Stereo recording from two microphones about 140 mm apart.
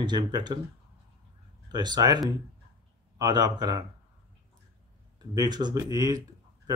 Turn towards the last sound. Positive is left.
turn(degrees=-25)  # may be behind; listen again after turning